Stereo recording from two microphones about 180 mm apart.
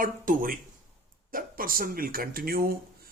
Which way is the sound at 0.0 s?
50° right (ahead or behind).